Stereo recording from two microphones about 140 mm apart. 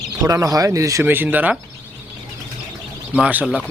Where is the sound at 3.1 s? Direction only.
10° right (ahead or behind).